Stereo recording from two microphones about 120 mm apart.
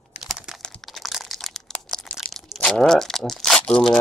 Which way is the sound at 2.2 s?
Centre (ahead or behind).